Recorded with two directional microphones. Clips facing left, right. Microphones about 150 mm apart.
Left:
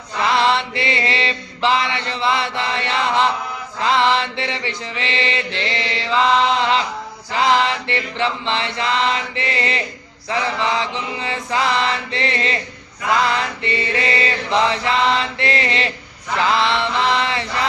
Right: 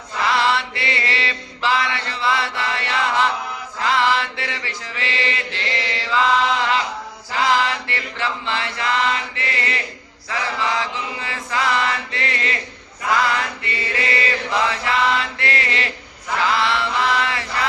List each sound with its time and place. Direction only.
0.2 s mantra: 20° left (ahead or behind)
3.8 s chant: 20° left (ahead or behind)
7.4 s mantra: 20° left (ahead or behind)
13.6 s mantra: 25° left (ahead or behind)
16.5 s chant: 20° left (ahead or behind)